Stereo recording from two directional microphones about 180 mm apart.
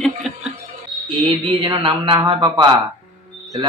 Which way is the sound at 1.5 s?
30° right (ahead or behind).